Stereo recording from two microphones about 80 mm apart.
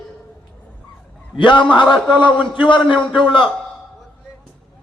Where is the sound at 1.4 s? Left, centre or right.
Left.